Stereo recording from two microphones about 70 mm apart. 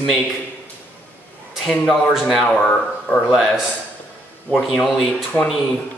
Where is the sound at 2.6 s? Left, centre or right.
Centre.